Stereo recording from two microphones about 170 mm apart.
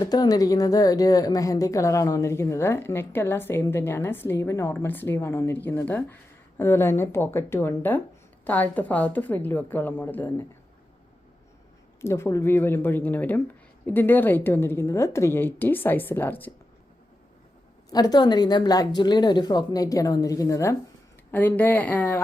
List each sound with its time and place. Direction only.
0.0 s a woman's voice: 25° left (ahead or behind)
11.9 s a woman's voice: 15° left (ahead or behind)
17.9 s a woman's voice: 25° left (ahead or behind)